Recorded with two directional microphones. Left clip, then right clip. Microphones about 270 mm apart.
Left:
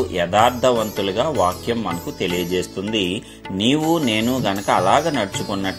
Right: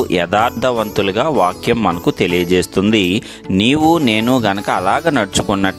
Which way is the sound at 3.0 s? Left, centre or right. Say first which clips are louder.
Right 3 dB; right.